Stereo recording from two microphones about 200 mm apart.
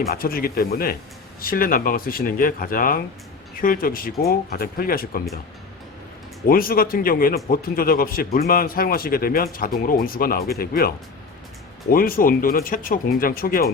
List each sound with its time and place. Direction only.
0.1 s speech: 45° left (ahead or behind)
6.5 s speech: 45° left (ahead or behind)